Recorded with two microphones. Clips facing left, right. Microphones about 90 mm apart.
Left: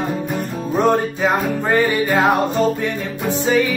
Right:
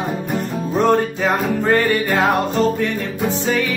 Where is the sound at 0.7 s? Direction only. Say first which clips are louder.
Even; 15° left (ahead or behind).